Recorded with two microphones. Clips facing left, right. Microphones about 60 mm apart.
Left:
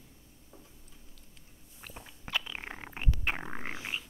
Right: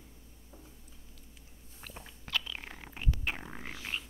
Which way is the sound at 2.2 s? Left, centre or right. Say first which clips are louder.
Left 1 dB; left.